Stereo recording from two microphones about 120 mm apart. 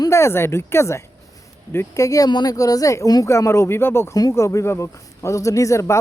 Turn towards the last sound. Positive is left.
turn(degrees=25)  # may be behind; listen again after turning